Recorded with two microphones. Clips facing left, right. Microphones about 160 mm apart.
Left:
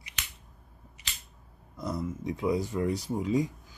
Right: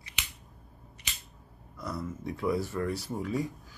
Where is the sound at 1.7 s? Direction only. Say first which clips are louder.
Left 3 dB; 20° left (ahead or behind).